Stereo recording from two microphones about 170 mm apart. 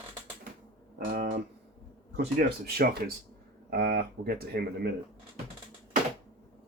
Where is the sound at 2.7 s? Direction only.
65° right (ahead or behind).